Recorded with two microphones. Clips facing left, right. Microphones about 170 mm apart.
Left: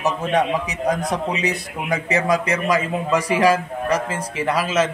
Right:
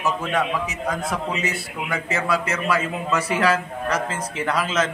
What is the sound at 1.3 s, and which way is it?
A man's voice, 15° left (ahead or behind).